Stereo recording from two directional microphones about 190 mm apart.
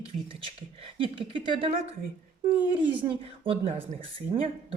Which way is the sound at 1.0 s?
25° right (ahead or behind).